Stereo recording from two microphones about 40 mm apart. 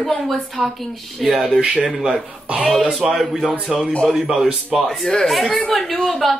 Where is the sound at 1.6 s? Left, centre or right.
Right.